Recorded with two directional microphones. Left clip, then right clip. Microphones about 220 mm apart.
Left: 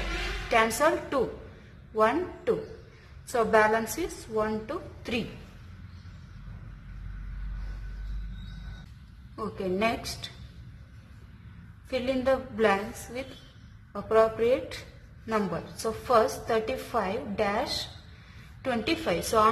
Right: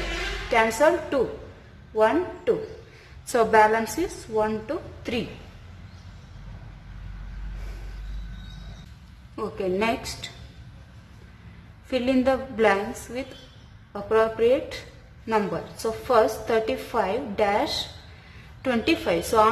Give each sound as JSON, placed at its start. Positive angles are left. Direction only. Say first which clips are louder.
{"t": 0.5, "sound": "a woman's voice", "louder": "right 4 dB", "side_deg": -15}
{"t": 9.6, "sound": "a woman's voice", "louder": "right 3 dB", "side_deg": -15}
{"t": 11.9, "sound": "a woman's voice", "louder": "right 4 dB", "side_deg": -15}